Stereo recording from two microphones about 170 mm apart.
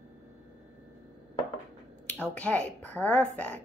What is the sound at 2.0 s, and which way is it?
Speech, 10° left (ahead or behind).